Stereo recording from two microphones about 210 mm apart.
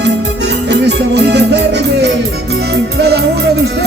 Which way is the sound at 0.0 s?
55° right (ahead or behind).